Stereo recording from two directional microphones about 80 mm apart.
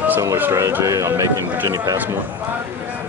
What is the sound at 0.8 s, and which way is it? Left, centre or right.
Speech, right.